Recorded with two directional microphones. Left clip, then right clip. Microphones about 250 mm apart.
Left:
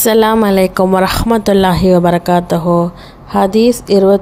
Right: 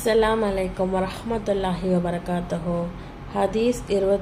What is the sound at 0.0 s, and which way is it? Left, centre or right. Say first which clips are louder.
Speech: left 10 dB; left.